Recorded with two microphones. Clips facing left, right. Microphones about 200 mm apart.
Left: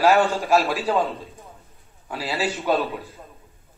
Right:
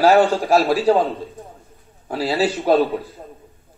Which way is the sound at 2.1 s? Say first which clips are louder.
Right 6 dB; 35° right (ahead or behind).